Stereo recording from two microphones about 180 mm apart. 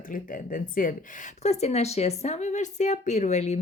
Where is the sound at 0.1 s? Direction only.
50° left (ahead or behind).